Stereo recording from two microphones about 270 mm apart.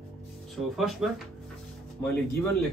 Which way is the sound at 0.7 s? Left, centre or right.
Centre.